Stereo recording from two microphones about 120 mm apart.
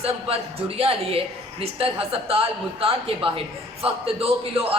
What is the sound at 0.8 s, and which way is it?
A woman's voice, 55° right (ahead or behind).